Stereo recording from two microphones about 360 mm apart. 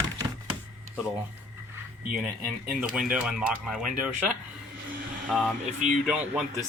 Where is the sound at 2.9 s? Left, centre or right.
Centre.